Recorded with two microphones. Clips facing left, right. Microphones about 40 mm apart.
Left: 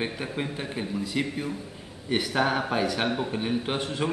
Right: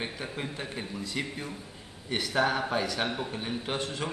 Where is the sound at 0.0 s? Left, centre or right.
Centre.